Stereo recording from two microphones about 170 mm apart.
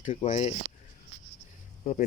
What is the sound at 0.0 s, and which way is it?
Speech, 35° left (ahead or behind).